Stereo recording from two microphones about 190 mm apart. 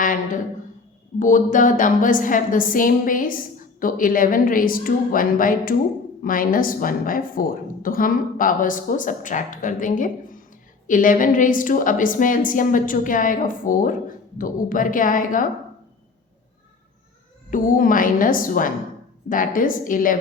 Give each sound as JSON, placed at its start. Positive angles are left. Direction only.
{"t": 1.2, "sound": "a woman's voice", "side_deg": 45}
{"t": 17.5, "sound": "a woman's voice", "side_deg": 45}